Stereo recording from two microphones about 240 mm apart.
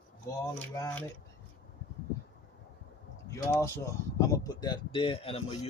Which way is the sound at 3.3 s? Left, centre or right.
Centre.